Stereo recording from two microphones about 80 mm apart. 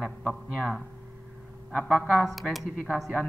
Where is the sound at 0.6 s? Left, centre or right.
Centre.